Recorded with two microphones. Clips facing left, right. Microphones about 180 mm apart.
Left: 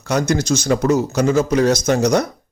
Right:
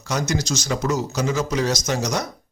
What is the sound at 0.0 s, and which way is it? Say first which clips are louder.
A man's voice: left 6 dB; 60° left (ahead or behind).